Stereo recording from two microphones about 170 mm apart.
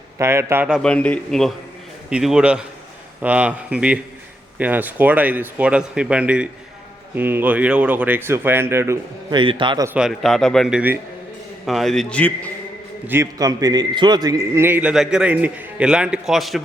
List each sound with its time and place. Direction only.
0.2 s a man's voice: 15° right (ahead or behind)
0.8 s a man's voice: 5° left (ahead or behind); by 9.0 s 15° right (ahead or behind)
9.3 s a man's voice: 30° right (ahead or behind)
9.8 s a man's voice: 5° right (ahead or behind)
13.1 s a man's voice: 20° right (ahead or behind); by 16.6 s centre (ahead or behind)